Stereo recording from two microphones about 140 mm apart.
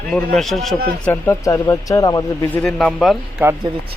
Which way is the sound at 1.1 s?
20° left (ahead or behind).